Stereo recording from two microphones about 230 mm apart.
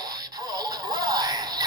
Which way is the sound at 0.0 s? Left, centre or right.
Centre.